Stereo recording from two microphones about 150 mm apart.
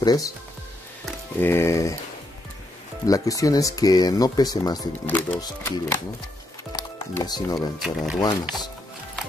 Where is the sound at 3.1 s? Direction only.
25° left (ahead or behind).